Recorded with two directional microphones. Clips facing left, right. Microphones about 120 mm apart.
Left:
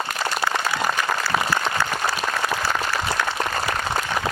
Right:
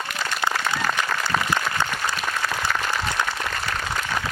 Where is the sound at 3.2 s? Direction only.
20° right (ahead or behind).